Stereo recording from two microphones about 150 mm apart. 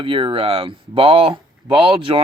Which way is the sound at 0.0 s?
35° right (ahead or behind).